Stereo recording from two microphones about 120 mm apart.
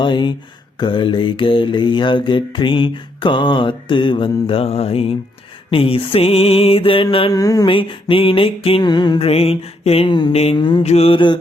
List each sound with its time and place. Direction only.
0.0 s speech: 40° left (ahead or behind)
0.8 s mantra: 40° left (ahead or behind)
7.3 s speech: 30° left (ahead or behind)
7.7 s mantra: 45° left (ahead or behind)
8.9 s speech: 40° left (ahead or behind)
9.2 s mantra: 55° left (ahead or behind)
10.3 s mantra: 60° left (ahead or behind)
10.6 s speech: 40° left (ahead or behind)
10.8 s mantra: 55° left (ahead or behind)